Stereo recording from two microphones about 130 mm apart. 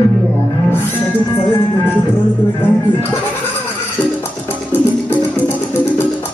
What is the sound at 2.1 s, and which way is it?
Music, 15° left (ahead or behind).